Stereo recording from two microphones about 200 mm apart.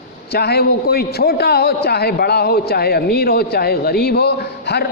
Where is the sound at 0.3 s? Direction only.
50° left (ahead or behind).